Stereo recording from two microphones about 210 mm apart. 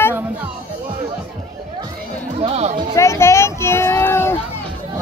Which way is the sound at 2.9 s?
15° left (ahead or behind).